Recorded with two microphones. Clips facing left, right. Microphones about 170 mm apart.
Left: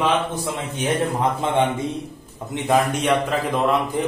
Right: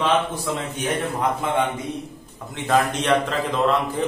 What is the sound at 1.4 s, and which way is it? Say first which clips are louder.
Speech: left 3 dB; 25° left (ahead or behind).